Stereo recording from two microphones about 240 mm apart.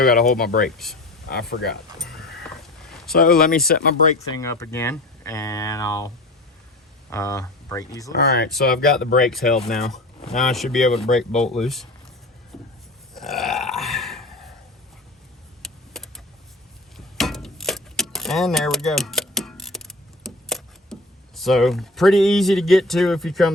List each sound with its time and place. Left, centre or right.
0.0 s speech: left
2.0 s music: centre
3.2 s speech: left
4.3 s speech: centre
7.1 s speech: centre
8.1 s speech: left
9.5 s speech: centre
12.5 s vehicle: centre
13.1 s burping: centre
15.6 s computer keyboard: centre
17.2 s a sound: centre